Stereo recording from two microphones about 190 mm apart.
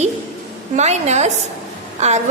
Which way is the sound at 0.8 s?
35° right (ahead or behind).